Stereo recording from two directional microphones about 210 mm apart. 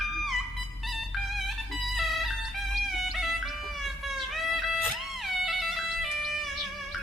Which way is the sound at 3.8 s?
Centre (ahead or behind).